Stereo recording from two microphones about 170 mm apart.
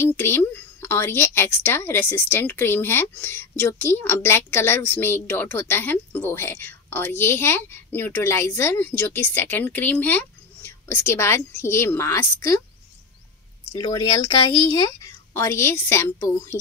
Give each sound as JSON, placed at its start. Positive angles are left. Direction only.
{"t": 0.0, "sound": "a woman's voice", "side_deg": 15}
{"t": 13.8, "sound": "a woman's voice", "side_deg": 20}